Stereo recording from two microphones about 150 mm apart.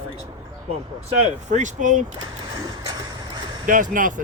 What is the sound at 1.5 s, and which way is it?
Speech, 55° right (ahead or behind).